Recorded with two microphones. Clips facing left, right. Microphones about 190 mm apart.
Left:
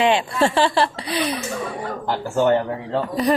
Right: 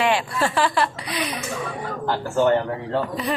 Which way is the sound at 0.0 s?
20° left (ahead or behind).